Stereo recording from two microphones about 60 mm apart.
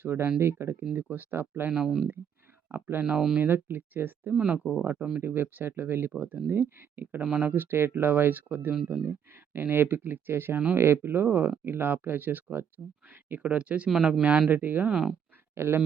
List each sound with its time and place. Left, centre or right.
0.0 s speech: right
1.7 s speech: centre
2.7 s speech: right
3.0 s speech: centre
3.3 s speech: right
4.4 s speech: centre
4.8 s speech: right; by 14.4 s centre
14.5 s speech: right
14.8 s speech: centre
15.5 s speech: right